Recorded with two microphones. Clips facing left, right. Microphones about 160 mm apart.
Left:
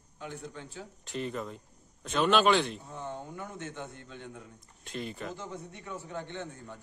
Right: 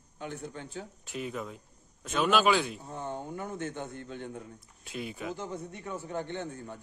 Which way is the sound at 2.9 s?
40° right (ahead or behind).